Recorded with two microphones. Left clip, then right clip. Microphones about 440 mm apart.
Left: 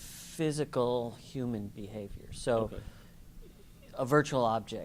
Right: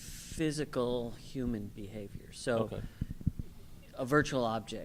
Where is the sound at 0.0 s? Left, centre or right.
Centre.